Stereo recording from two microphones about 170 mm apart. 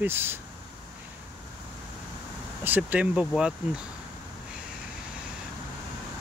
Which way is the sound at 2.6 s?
10° right (ahead or behind).